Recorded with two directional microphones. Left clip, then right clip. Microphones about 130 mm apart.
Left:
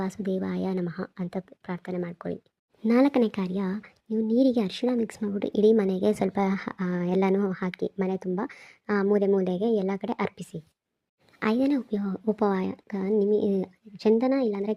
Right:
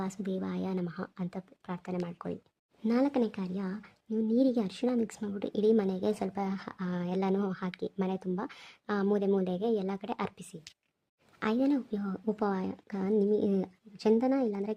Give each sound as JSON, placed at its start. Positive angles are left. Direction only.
{"t": 0.0, "sound": "speech", "side_deg": 20}
{"t": 2.8, "sound": "a woman's voice", "side_deg": 35}